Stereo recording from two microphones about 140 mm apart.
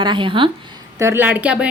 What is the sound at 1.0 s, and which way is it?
Speech, 15° right (ahead or behind).